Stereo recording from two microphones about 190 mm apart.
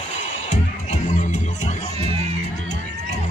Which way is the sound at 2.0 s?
30° right (ahead or behind).